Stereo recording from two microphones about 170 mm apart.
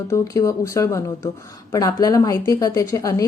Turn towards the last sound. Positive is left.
turn(degrees=20)  # may be behind; listen again after turning